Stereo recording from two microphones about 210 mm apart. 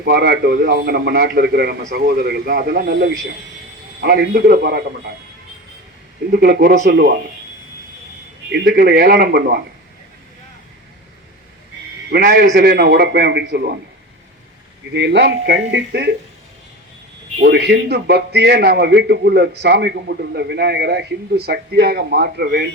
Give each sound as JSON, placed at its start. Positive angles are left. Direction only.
{"t": 0.0, "sound": "a man's voice", "side_deg": -50}
{"t": 6.3, "sound": "a man's voice", "side_deg": -50}
{"t": 8.5, "sound": "a man's voice", "side_deg": -50}
{"t": 12.1, "sound": "a man's voice", "side_deg": -50}
{"t": 14.9, "sound": "a man's voice", "side_deg": -55}
{"t": 17.4, "sound": "a man's voice", "side_deg": -50}